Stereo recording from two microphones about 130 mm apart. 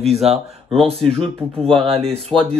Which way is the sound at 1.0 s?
5° left (ahead or behind).